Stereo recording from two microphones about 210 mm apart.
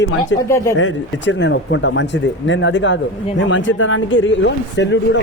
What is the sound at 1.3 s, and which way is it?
Speech, 55° left (ahead or behind).